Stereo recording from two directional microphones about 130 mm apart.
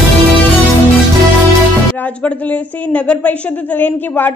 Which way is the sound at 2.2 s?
10° left (ahead or behind).